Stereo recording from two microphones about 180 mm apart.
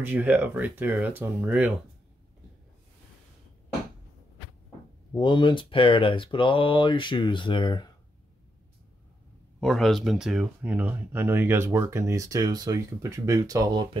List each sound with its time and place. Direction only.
0.0 s speech: 10° right (ahead or behind)
5.1 s speech: 25° left (ahead or behind)
9.6 s speech: centre (ahead or behind); by 13.8 s 20° right (ahead or behind)